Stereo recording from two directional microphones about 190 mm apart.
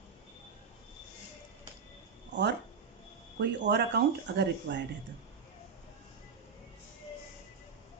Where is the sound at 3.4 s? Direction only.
65° right (ahead or behind).